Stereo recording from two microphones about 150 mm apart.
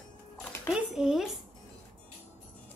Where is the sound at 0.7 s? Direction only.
5° right (ahead or behind).